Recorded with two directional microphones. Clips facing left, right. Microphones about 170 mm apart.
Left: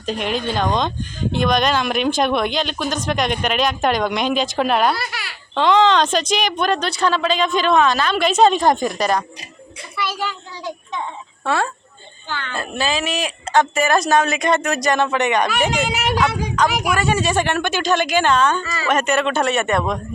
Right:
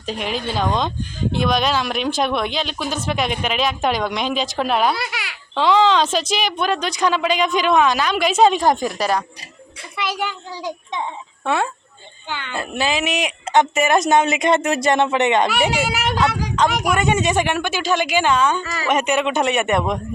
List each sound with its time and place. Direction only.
0.0 s speech: centre (ahead or behind)
9.9 s a child's voice: 15° right (ahead or behind)
15.4 s speech: 10° right (ahead or behind)
16.9 s speech: 20° right (ahead or behind)